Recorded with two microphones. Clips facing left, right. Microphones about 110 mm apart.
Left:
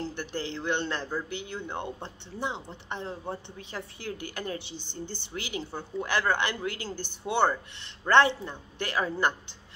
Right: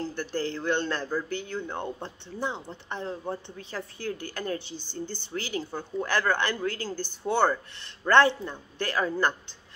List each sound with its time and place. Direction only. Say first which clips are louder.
0.0 s a man's voice: right 3 dB; 20° left (ahead or behind)
8.1 s a woman's voice: right 1 dB; 20° left (ahead or behind)